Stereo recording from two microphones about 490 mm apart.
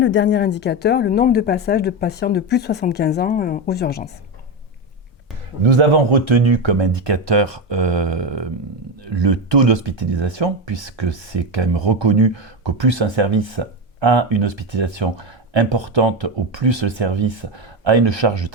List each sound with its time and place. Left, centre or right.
0.0 s speech: left
5.6 s speech: right